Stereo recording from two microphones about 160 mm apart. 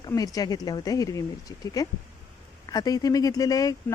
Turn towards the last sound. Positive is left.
turn(degrees=20)  # may be behind; listen again after turning